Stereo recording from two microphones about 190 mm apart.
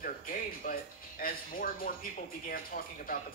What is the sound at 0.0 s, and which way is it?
Speech, 45° left (ahead or behind).